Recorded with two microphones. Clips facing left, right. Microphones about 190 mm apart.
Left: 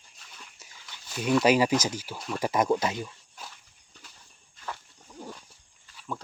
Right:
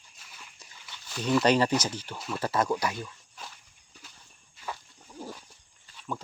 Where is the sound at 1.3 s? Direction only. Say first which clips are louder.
Left 1 dB; 5° left (ahead or behind).